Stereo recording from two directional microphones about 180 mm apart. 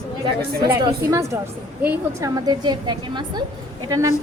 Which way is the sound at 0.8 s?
15° right (ahead or behind).